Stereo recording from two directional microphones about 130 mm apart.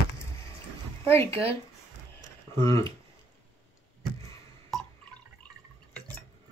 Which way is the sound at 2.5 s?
20° left (ahead or behind).